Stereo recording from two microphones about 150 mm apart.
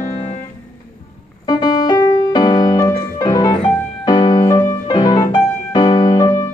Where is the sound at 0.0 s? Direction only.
50° left (ahead or behind).